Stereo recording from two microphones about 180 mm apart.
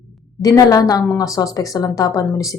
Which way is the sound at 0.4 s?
20° left (ahead or behind).